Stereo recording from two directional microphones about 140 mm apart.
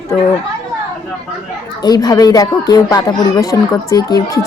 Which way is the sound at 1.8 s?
30° left (ahead or behind).